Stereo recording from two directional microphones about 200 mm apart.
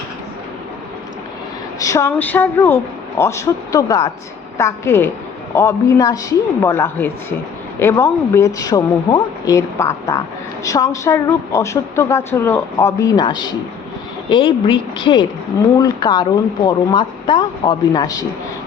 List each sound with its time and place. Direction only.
1.8 s speech: 15° left (ahead or behind)